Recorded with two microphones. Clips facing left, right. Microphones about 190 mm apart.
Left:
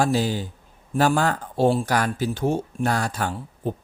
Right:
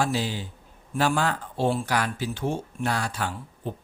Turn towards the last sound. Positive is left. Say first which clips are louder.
# left 5 dB
turn(degrees=45)  # may be behind; listen again after turning